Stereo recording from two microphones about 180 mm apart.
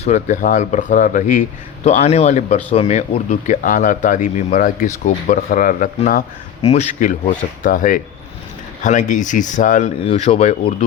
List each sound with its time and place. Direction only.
0.0 s speech: 40° left (ahead or behind)
6.6 s speech: 35° left (ahead or behind)